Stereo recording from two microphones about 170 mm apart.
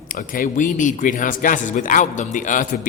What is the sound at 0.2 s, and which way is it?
Speech, 55° left (ahead or behind).